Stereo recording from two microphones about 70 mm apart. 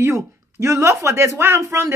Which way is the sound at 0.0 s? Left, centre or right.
Right.